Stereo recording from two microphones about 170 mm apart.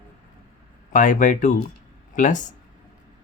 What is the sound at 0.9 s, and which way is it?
Speech, 50° left (ahead or behind).